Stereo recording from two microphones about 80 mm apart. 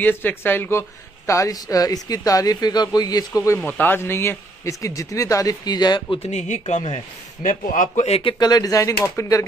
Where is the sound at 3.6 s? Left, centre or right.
Left.